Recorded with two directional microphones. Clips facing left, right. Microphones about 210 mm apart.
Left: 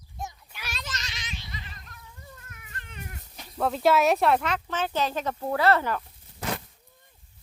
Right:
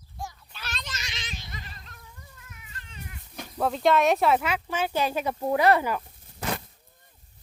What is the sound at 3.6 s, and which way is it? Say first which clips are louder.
Speech: even; centre (ahead or behind).